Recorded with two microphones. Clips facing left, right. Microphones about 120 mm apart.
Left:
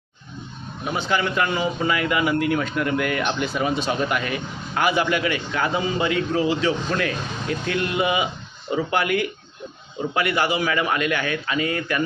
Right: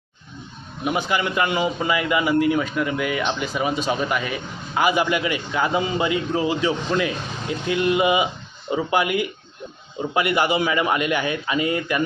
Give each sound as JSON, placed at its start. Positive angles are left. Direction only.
{"t": 0.9, "sound": "a man's voice", "side_deg": -10}